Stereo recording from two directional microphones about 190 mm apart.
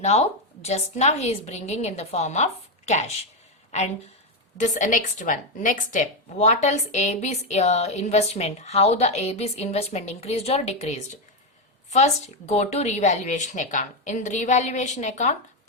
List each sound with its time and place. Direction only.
0.0 s speech: 35° left (ahead or behind)